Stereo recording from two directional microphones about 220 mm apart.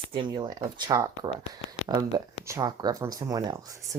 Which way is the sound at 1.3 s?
25° left (ahead or behind).